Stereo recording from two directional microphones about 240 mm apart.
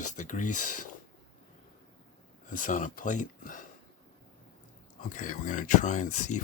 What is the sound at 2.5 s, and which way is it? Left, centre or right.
Speech, left.